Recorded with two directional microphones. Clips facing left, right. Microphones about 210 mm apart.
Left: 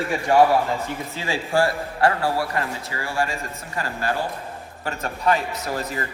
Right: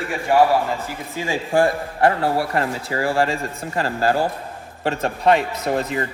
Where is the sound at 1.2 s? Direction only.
15° right (ahead or behind).